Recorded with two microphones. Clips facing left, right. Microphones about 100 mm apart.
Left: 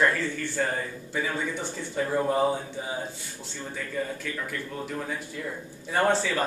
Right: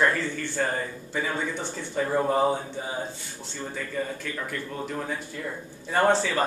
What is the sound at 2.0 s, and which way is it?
Speech, 20° right (ahead or behind).